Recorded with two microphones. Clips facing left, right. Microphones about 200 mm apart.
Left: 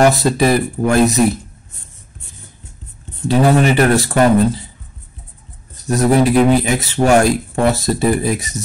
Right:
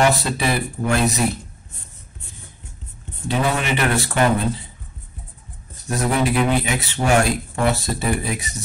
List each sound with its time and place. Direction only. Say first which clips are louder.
0.0 s speech: left 6 dB; 40° left (ahead or behind)
3.3 s speech: left 9 dB; 40° left (ahead or behind)
5.9 s speech: left 7 dB; 40° left (ahead or behind)